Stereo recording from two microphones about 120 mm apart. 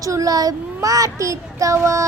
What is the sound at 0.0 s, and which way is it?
A child's voice, 30° right (ahead or behind).